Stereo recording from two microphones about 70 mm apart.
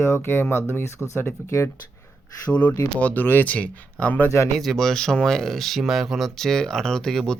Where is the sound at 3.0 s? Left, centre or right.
Centre.